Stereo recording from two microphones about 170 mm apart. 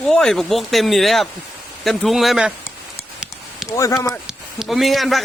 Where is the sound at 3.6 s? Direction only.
20° left (ahead or behind).